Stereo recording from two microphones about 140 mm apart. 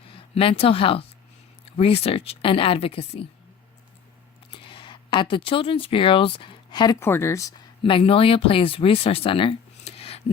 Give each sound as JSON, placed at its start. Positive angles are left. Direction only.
{"t": 0.1, "sound": "a woman's voice", "side_deg": 40}
{"t": 4.5, "sound": "speech", "side_deg": 35}
{"t": 7.0, "sound": "speech", "side_deg": 20}
{"t": 7.9, "sound": "speech", "side_deg": 40}